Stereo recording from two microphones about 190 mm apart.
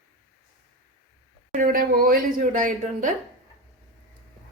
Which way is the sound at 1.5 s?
50° right (ahead or behind).